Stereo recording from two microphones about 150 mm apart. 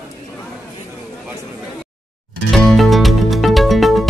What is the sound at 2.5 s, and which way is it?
Music, centre (ahead or behind).